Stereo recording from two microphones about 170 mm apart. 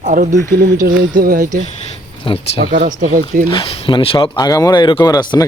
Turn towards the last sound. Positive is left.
turn(degrees=25)  # may be behind; listen again after turning